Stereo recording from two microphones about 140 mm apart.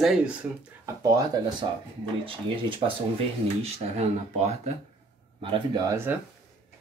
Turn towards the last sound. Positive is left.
turn(degrees=-15)  # may be behind; listen again after turning